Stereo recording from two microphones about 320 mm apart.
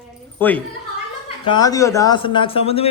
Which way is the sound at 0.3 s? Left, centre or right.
Centre.